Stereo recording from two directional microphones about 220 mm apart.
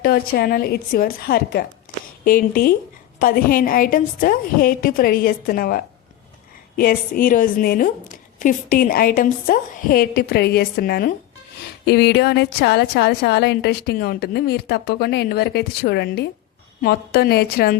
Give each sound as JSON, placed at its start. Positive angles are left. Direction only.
{"t": 0.0, "sound": "a woman's voice", "side_deg": 45}